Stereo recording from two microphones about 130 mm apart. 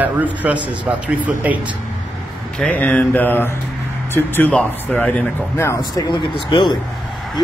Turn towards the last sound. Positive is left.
turn(degrees=40)  # may be behind; listen again after turning